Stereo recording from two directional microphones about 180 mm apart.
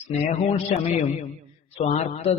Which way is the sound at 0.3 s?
35° left (ahead or behind).